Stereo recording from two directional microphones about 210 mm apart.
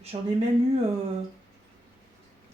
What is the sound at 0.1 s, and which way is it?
Speech, 25° right (ahead or behind).